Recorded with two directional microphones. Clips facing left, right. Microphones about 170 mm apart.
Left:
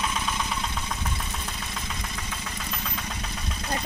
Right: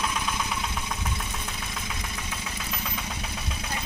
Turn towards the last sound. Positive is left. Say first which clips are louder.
# even
turn(degrees=-5)  # may be behind; listen again after turning